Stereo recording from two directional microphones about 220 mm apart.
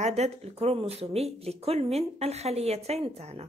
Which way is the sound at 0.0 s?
30° right (ahead or behind).